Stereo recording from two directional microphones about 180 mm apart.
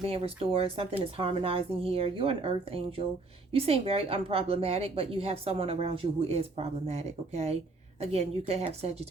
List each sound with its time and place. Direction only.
0.0 s a woman's voice: 35° right (ahead or behind)